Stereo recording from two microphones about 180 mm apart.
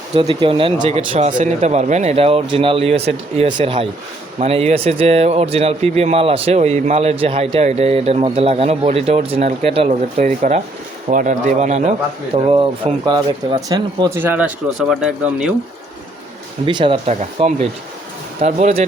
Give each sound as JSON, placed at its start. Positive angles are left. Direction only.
{"t": 0.1, "sound": "speech", "side_deg": -25}
{"t": 11.1, "sound": "speech", "side_deg": -45}
{"t": 14.2, "sound": "speech", "side_deg": -10}
{"t": 16.6, "sound": "speech", "side_deg": -25}